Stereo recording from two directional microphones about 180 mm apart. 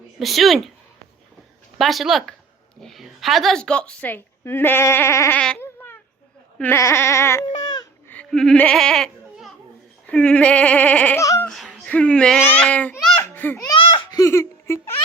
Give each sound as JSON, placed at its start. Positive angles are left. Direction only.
{"t": 0.2, "sound": "a woman's voice", "side_deg": 0}
{"t": 1.8, "sound": "a woman's voice", "side_deg": 0}
{"t": 5.4, "sound": "goat", "side_deg": 10}
{"t": 6.6, "sound": "speech", "side_deg": 15}
{"t": 8.0, "sound": "a sound", "side_deg": 10}
{"t": 10.1, "sound": "a woman's voice", "side_deg": 5}
{"t": 11.4, "sound": "babbling", "side_deg": 0}
{"t": 13.6, "sound": "a sound", "side_deg": 25}